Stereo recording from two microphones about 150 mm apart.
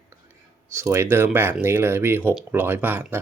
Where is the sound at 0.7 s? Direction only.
20° right (ahead or behind).